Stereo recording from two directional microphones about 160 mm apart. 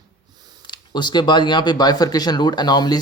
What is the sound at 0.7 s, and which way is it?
Speech, 25° left (ahead or behind).